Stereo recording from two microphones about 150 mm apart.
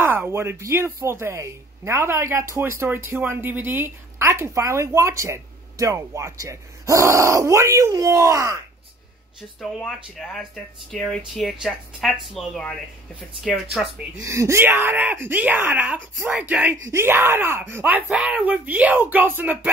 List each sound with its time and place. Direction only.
0.0 s a woman's voice: 15° right (ahead or behind)
9.6 s speech: centre (ahead or behind)
14.2 s speech: 20° right (ahead or behind)